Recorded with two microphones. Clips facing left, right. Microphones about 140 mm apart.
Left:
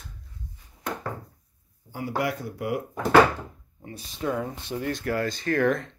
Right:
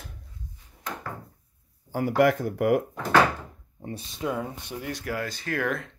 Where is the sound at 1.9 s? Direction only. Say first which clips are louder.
Right 7 dB; 50° right (ahead or behind).